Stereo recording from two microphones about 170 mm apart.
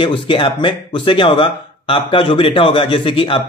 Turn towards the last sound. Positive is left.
turn(degrees=30)  # may be behind; listen again after turning